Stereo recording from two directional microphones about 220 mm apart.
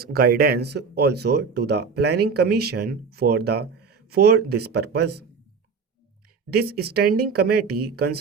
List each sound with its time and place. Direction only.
0.0 s speech: 45° right (ahead or behind)
6.5 s speech: 45° right (ahead or behind)